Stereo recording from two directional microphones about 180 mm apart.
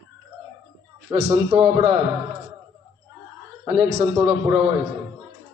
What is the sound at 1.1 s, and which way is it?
Speech, 35° right (ahead or behind).